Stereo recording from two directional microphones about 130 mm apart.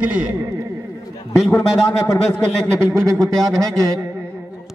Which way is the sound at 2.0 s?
25° left (ahead or behind).